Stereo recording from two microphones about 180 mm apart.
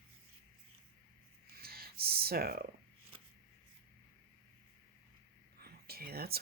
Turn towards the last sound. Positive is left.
turn(degrees=-60)  # may be behind; listen again after turning